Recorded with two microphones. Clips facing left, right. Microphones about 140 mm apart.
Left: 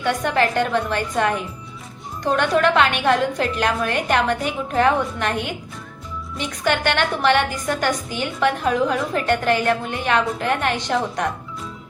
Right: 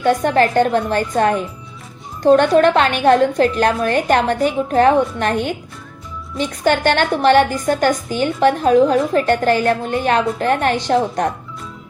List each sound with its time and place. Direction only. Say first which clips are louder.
0.0 s a woman's voice: right 5 dB; 35° right (ahead or behind)